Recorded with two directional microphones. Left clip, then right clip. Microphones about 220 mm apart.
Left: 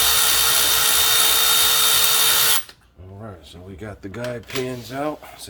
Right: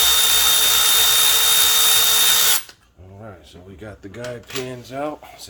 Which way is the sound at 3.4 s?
25° left (ahead or behind).